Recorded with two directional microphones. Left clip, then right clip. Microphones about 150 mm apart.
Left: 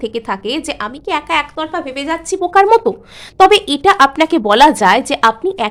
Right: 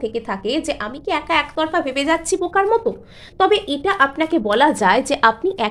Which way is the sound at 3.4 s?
35° left (ahead or behind).